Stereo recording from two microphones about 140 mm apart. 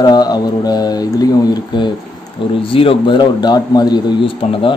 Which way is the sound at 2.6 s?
40° left (ahead or behind).